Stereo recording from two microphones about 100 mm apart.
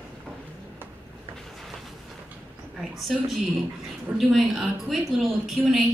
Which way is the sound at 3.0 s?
Centre (ahead or behind).